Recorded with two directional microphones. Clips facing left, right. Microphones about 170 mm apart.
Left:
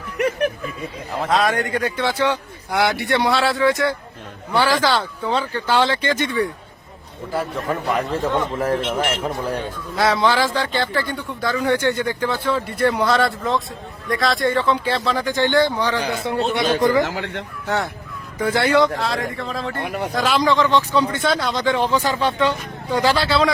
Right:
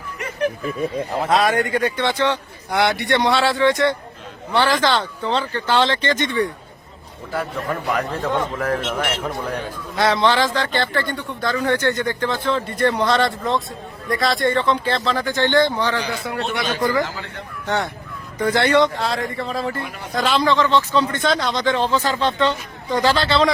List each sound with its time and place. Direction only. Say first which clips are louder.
0.2 s speech: left 4 dB; 60° left (ahead or behind)
1.2 s a man's voice: right 1 dB; 5° right (ahead or behind)
8.5 s a man's voice: left 2 dB; 30° left (ahead or behind)
9.9 s speech: even; centre (ahead or behind)
16.2 s a man's voice: left 4 dB; 25° left (ahead or behind)
17.0 s speech: left 3 dB; 65° left (ahead or behind)
18.3 s a man's voice: even; 5° left (ahead or behind)
19.7 s speech: left 5 dB; 65° left (ahead or behind)
20.1 s speech: right 1 dB; 10° left (ahead or behind)